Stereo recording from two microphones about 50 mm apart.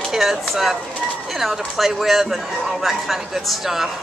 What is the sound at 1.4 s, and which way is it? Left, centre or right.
Speech, centre.